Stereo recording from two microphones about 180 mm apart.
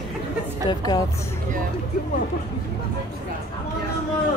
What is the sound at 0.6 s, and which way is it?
Speech, 20° left (ahead or behind).